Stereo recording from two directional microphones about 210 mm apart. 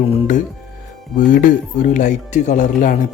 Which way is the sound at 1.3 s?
40° left (ahead or behind).